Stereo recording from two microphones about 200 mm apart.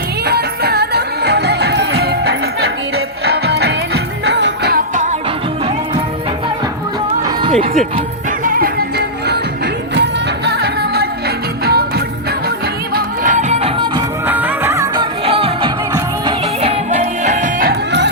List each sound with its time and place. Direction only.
0.3 s music: 55° right (ahead or behind)
7.2 s music: 20° right (ahead or behind)
8.4 s music: 50° right (ahead or behind)
10.4 s music: 55° right (ahead or behind); by 14.0 s 25° right (ahead or behind)
14.3 s music of bollywood: 10° right (ahead or behind)
15.2 s music: 30° right (ahead or behind)
17.7 s music: 60° right (ahead or behind)